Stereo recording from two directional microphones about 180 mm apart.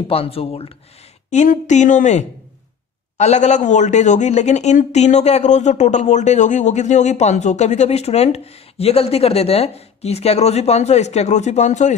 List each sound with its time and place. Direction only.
0.1 s speech: 30° left (ahead or behind)